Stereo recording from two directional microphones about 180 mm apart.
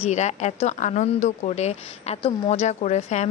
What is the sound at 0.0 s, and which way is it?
Speech, 40° left (ahead or behind).